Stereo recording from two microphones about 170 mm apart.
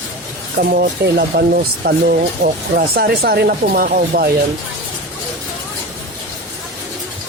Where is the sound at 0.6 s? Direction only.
60° right (ahead or behind).